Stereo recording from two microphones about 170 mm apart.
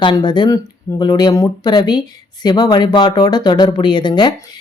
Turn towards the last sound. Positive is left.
turn(degrees=25)  # may be behind; listen again after turning